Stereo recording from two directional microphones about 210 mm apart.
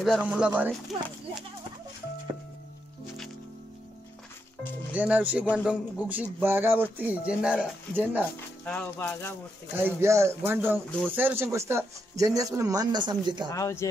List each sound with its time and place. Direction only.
0.0 s speech: 5° right (ahead or behind)
4.9 s speech: 5° right (ahead or behind)
8.6 s speech: 10° left (ahead or behind)
9.7 s speech: 10° right (ahead or behind)
13.5 s speech: 15° left (ahead or behind)